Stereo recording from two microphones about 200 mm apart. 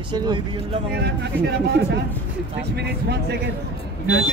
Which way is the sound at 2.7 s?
55° right (ahead or behind).